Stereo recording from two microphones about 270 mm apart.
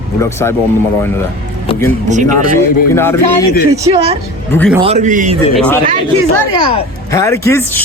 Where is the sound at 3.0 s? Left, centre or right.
Centre.